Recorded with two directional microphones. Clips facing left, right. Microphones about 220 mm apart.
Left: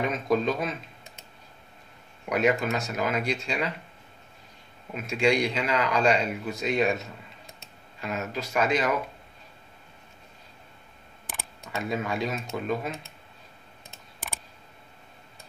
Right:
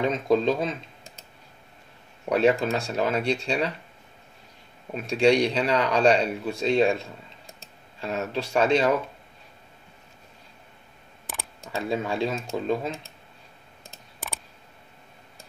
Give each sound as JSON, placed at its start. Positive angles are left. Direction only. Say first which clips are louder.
{"t": 0.0, "sound": "speech", "louder": "right 3 dB", "side_deg": -25}
{"t": 2.2, "sound": "speech", "louder": "right 3 dB", "side_deg": -30}
{"t": 4.9, "sound": "speech", "louder": "right 4 dB", "side_deg": -35}
{"t": 11.6, "sound": "speech", "louder": "right 2 dB", "side_deg": -30}